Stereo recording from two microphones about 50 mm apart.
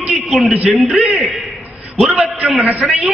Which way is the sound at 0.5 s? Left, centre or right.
Right.